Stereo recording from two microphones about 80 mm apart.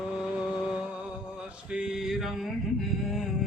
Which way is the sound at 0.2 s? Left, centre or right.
Centre.